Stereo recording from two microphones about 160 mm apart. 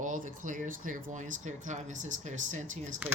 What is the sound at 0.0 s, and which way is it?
A woman's voice, 55° right (ahead or behind).